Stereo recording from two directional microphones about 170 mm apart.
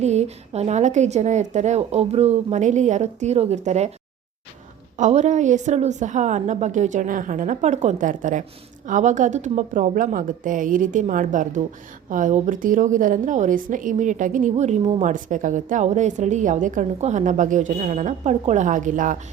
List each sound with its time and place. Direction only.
0.0 s a woman's voice: 40° right (ahead or behind)
4.9 s a woman's voice: 45° right (ahead or behind)
15.0 s a woman's voice: 50° right (ahead or behind)